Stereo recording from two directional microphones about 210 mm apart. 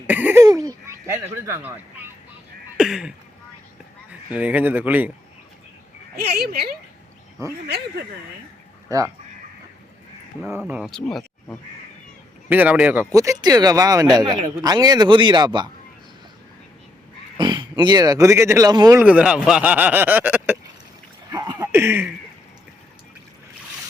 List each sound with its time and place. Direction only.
0.1 s throat clearing: 10° right (ahead or behind)
2.7 s a sound: 5° right (ahead or behind)
4.3 s speech: 5° right (ahead or behind)
6.1 s speech: 50° right (ahead or behind)
8.9 s speech: 15° right (ahead or behind)
10.4 s speech: 5° right (ahead or behind)
12.5 s speech: 10° right (ahead or behind)
17.3 s speech: 20° right (ahead or behind)
21.2 s a sound: 20° right (ahead or behind)